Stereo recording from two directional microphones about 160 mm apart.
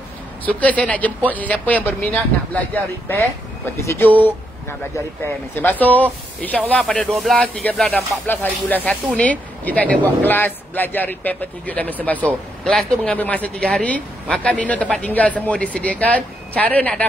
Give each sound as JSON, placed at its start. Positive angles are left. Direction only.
{"t": 0.5, "sound": "a woman's voice", "side_deg": 10}